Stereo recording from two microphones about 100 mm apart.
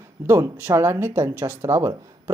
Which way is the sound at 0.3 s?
25° right (ahead or behind).